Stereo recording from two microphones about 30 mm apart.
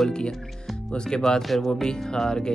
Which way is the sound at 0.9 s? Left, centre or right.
Left.